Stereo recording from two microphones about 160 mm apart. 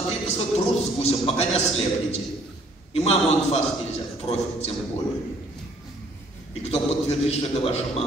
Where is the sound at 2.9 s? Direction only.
40° left (ahead or behind).